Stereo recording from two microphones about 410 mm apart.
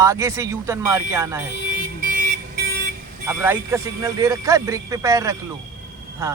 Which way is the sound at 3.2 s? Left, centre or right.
Centre.